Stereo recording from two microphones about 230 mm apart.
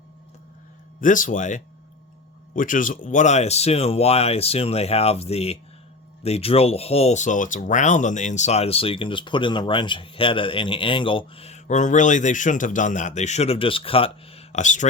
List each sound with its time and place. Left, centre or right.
1.0 s speech: left